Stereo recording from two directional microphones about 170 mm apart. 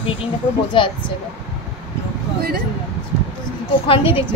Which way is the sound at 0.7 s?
30° left (ahead or behind).